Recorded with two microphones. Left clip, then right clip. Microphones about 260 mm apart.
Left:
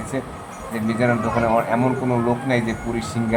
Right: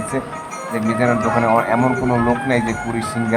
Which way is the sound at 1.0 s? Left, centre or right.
Centre.